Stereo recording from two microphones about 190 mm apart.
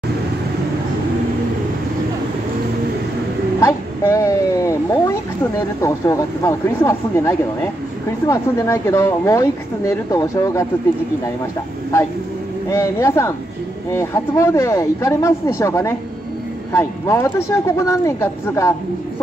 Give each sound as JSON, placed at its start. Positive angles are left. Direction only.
{"t": 3.6, "sound": "speech", "side_deg": 15}
{"t": 12.6, "sound": "speech", "side_deg": 15}